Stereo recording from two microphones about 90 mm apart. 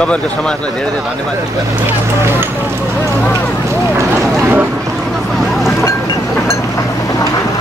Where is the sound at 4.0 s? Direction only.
25° right (ahead or behind).